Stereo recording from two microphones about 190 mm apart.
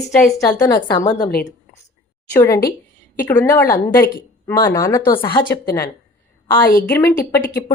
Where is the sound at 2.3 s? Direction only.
15° left (ahead or behind).